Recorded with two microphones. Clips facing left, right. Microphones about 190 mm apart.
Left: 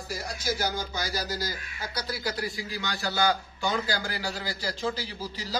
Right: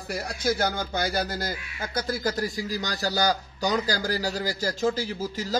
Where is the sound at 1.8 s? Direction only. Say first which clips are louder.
Right 5 dB; 50° right (ahead or behind).